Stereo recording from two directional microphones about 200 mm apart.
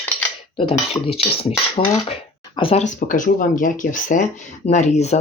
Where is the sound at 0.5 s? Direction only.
30° left (ahead or behind).